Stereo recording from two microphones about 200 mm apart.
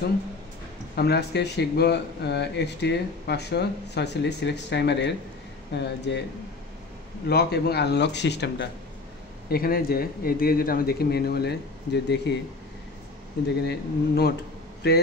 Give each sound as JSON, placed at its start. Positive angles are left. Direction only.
{"t": 0.9, "sound": "speech", "side_deg": 55}
{"t": 7.2, "sound": "speech", "side_deg": 55}
{"t": 9.5, "sound": "speech", "side_deg": 50}
{"t": 13.7, "sound": "speech", "side_deg": 55}